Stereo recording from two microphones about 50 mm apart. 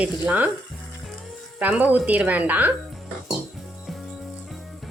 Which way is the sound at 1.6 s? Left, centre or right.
Right.